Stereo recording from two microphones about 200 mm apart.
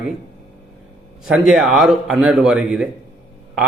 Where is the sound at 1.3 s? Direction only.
5° right (ahead or behind).